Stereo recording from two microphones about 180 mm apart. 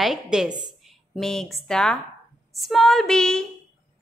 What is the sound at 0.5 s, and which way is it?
Speech, 25° right (ahead or behind).